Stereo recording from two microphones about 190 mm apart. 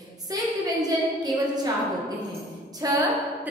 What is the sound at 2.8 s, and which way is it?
Speech, 20° right (ahead or behind).